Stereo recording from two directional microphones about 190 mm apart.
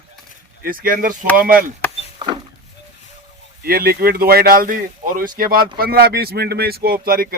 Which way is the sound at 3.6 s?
50° right (ahead or behind).